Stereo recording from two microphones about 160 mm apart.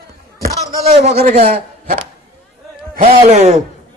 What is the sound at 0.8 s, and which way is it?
Speech, 45° right (ahead or behind).